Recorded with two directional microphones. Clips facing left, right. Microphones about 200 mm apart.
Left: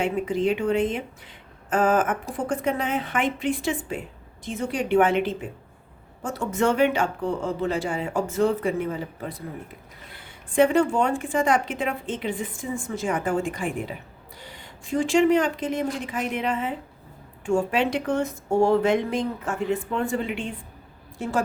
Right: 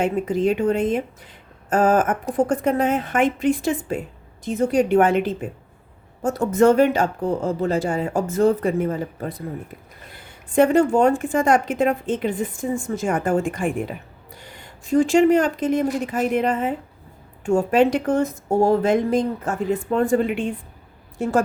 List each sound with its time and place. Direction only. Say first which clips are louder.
0.0 s a woman's voice: right 3 dB; 45° right (ahead or behind)
10.5 s a woman's voice: right 4 dB; 40° right (ahead or behind)
14.8 s a woman's voice: right 4 dB; 40° right (ahead or behind)